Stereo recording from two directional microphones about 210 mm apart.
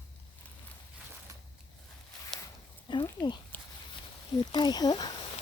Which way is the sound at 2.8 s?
20° left (ahead or behind).